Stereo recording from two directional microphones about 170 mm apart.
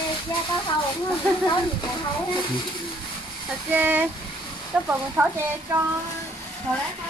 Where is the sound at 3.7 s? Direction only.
10° right (ahead or behind).